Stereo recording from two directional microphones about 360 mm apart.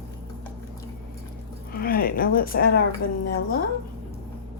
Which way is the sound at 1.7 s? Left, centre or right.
Left.